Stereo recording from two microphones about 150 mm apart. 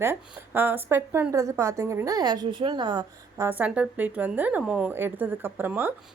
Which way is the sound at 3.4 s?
10° right (ahead or behind).